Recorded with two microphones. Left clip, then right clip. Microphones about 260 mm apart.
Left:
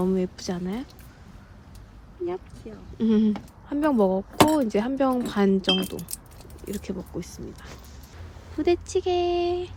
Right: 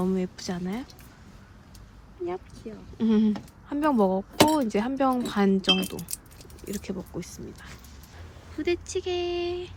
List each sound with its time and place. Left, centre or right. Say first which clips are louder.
0.0 s speech: left 3 dB; centre
3.0 s speech: left 2 dB; centre
8.5 s speech: left 5 dB; centre